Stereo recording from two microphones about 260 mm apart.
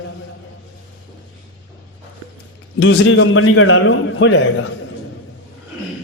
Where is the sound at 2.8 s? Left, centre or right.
Left.